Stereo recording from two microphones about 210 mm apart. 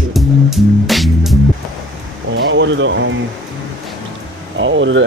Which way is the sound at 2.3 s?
60° right (ahead or behind).